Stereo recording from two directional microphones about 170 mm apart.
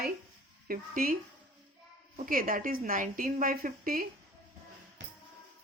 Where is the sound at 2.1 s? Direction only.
55° right (ahead or behind).